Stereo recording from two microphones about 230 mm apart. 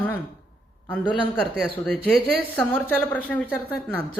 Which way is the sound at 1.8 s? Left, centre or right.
Centre.